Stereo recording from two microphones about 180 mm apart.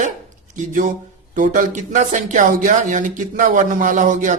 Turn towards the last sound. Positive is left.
turn(degrees=-45)  # may be behind; listen again after turning